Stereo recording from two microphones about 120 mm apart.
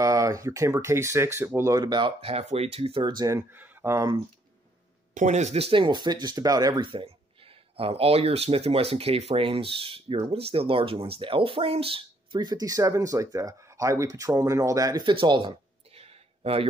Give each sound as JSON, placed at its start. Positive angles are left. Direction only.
{"t": 0.0, "sound": "speech", "side_deg": -30}
{"t": 1.9, "sound": "speech", "side_deg": -40}
{"t": 2.2, "sound": "speech", "side_deg": -55}
{"t": 3.3, "sound": "speech", "side_deg": -20}
{"t": 5.1, "sound": "speech", "side_deg": -80}
{"t": 15.0, "sound": "speech", "side_deg": -40}
{"t": 15.9, "sound": "a sound", "side_deg": -55}